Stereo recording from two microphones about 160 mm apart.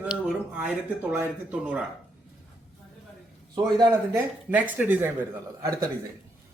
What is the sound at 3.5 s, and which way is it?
Speech, 25° right (ahead or behind).